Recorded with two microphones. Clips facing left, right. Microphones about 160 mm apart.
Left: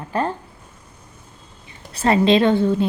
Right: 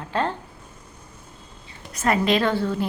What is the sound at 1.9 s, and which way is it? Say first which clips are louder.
Speech: left 5 dB; 25° left (ahead or behind).